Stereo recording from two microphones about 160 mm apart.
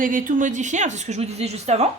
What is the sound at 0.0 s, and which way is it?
Speech, 55° right (ahead or behind).